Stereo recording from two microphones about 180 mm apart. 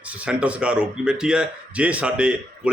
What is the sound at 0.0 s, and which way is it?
Speech, 5° right (ahead or behind).